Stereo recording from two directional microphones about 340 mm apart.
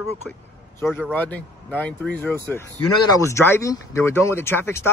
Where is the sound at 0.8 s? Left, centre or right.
Centre.